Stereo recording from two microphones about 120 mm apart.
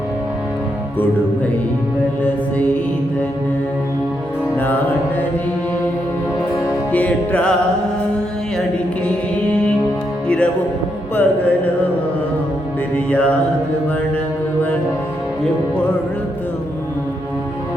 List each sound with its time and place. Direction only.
4.5 s music: 15° left (ahead or behind)
6.9 s music: 15° left (ahead or behind)
10.2 s music: 10° left (ahead or behind)
13.1 s music: 10° left (ahead or behind)